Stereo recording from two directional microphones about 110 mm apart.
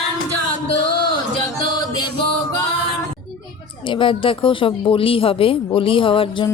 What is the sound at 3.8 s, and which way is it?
Speech, 50° left (ahead or behind).